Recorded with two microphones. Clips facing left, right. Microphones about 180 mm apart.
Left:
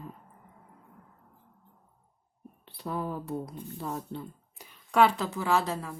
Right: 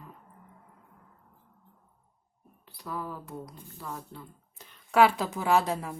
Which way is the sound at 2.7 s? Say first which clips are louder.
Left 4 dB; 25° left (ahead or behind).